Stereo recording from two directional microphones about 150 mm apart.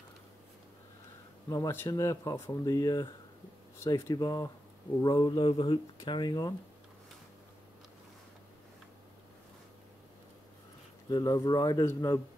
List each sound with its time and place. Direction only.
1.5 s speech: 20° left (ahead or behind)
11.1 s speech: 25° left (ahead or behind)